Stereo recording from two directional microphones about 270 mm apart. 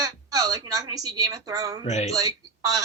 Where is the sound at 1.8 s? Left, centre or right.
Left.